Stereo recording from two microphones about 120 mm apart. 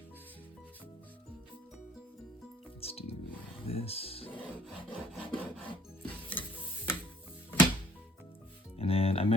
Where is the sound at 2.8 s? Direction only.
55° left (ahead or behind).